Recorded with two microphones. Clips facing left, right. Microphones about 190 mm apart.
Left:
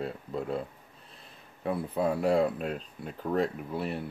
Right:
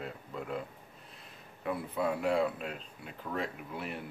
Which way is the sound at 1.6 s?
35° left (ahead or behind).